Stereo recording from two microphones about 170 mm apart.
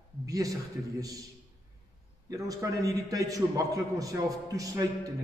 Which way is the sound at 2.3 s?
20° right (ahead or behind).